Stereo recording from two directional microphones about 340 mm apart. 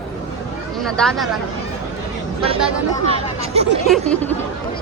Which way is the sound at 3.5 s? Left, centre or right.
Centre.